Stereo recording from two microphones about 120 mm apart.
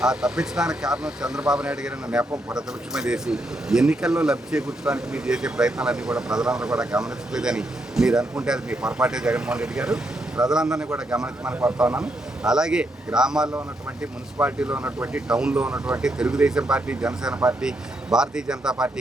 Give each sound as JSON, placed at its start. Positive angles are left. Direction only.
{"t": 0.0, "sound": "speech", "side_deg": -5}
{"t": 13.5, "sound": "speech", "side_deg": -20}
{"t": 15.1, "sound": "speech", "side_deg": -5}